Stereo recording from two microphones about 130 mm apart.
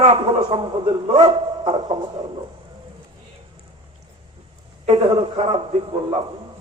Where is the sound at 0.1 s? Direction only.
35° right (ahead or behind).